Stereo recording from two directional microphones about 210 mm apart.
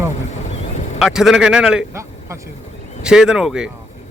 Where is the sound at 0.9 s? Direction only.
Centre (ahead or behind).